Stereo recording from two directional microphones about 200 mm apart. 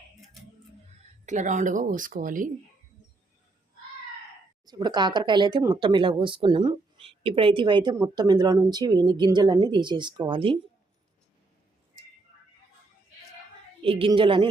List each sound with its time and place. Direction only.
1.2 s speech: 35° right (ahead or behind)
4.6 s speech: 20° right (ahead or behind)
13.8 s speech: 25° right (ahead or behind)